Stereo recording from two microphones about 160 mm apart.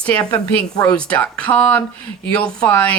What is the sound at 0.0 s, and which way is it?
Speech, 5° left (ahead or behind).